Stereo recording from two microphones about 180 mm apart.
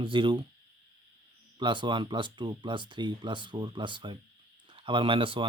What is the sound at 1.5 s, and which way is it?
Speech, 25° right (ahead or behind).